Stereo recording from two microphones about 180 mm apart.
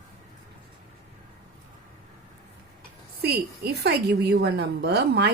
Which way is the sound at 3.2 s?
65° right (ahead or behind).